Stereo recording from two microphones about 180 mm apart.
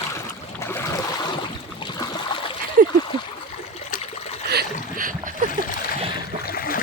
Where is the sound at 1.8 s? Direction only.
20° left (ahead or behind).